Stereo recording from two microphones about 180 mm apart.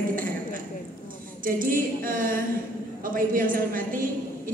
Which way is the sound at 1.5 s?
50° right (ahead or behind).